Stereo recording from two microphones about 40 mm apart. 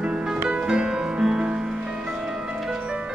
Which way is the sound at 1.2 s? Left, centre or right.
Centre.